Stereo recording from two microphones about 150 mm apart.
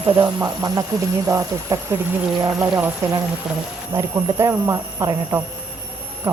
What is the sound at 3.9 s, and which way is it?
Speech, 20° right (ahead or behind).